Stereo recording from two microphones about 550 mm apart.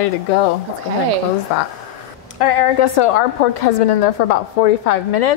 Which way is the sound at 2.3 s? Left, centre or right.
Left.